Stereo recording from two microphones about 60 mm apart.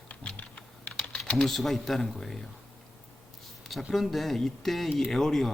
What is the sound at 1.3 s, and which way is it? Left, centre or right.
Speech, centre.